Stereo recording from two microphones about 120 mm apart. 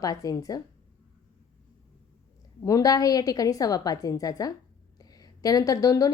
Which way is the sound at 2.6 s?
30° left (ahead or behind).